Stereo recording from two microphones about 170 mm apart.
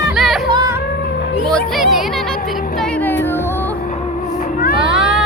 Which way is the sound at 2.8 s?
10° left (ahead or behind).